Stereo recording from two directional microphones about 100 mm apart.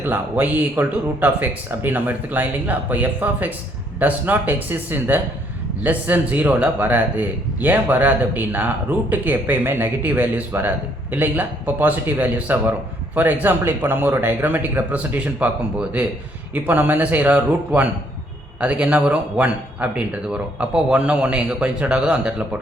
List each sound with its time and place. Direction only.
0.0 s a man's voice: 15° right (ahead or behind)